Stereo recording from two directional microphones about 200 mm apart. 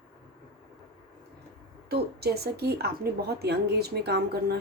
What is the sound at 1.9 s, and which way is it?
Speech, 50° right (ahead or behind).